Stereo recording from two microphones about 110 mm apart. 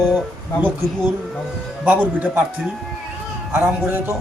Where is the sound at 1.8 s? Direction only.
15° right (ahead or behind).